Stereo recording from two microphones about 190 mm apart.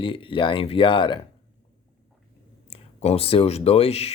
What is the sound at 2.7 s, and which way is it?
Speech, 35° left (ahead or behind).